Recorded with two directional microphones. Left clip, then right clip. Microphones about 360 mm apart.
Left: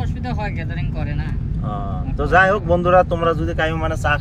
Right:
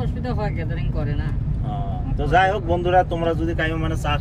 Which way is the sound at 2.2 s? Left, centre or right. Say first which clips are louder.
Left 3 dB; left.